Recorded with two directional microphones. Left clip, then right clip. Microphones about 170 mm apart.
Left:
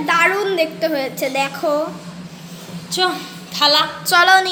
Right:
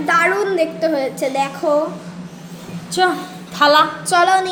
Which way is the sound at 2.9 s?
45° right (ahead or behind).